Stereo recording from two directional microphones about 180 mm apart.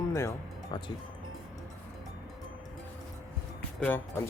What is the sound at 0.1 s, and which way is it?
Music, 15° left (ahead or behind).